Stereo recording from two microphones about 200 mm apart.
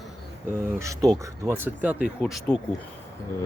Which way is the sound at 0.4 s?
15° right (ahead or behind).